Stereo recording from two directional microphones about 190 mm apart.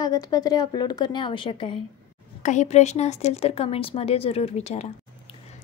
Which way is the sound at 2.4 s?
40° left (ahead or behind).